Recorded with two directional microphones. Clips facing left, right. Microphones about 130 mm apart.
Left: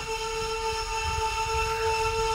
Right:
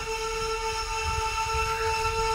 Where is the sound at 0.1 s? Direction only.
15° left (ahead or behind).